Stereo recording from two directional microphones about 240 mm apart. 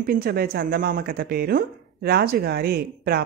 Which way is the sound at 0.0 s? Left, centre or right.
Right.